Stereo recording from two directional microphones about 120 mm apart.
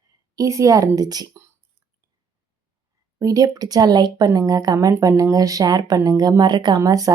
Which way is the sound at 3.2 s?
30° right (ahead or behind).